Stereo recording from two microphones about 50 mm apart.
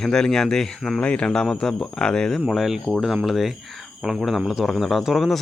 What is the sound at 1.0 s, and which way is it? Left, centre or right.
Speech, left.